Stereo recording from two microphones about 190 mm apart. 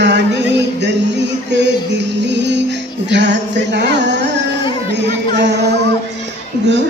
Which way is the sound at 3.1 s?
65° right (ahead or behind).